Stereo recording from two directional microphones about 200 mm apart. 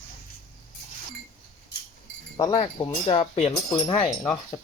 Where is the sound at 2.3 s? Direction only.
20° left (ahead or behind).